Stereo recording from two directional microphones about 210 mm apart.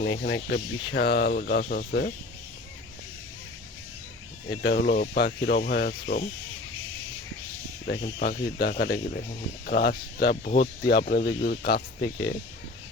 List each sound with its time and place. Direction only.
0.0 s speech: 55° left (ahead or behind)
4.4 s speech: 60° left (ahead or behind)
7.9 s speech: 50° left (ahead or behind)